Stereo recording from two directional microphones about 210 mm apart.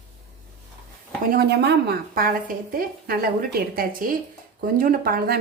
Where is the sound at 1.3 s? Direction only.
50° right (ahead or behind).